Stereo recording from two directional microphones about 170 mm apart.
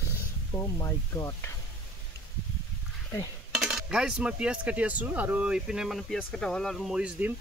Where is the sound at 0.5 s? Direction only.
15° left (ahead or behind).